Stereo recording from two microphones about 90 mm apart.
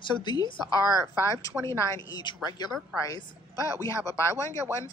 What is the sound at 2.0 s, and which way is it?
Speech, 50° left (ahead or behind).